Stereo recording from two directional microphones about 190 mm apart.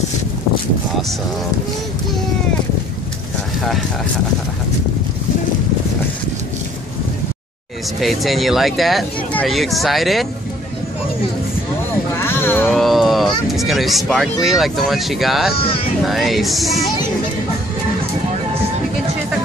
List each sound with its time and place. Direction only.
8.0 s speech: centre (ahead or behind)
12.2 s a sound: 10° left (ahead or behind)
12.7 s a sound: centre (ahead or behind)
13.5 s speech: centre (ahead or behind)
15.6 s speech: 30° left (ahead or behind)
16.1 s speech: centre (ahead or behind)